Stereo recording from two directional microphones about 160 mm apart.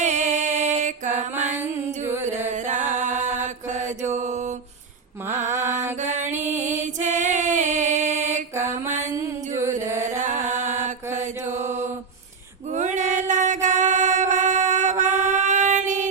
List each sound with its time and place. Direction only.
0.0 s music: 45° right (ahead or behind)
2.0 s music: 15° right (ahead or behind)
2.5 s mantra: 50° right (ahead or behind)
5.5 s mantra: 15° right (ahead or behind)
6.0 s music: 50° right (ahead or behind)
8.5 s mantra: 15° right (ahead or behind)
9.9 s chant: 15° right (ahead or behind)
10.2 s music: 50° right (ahead or behind)
10.5 s mantra: 50° right (ahead or behind)
12.7 s singing: 50° right (ahead or behind)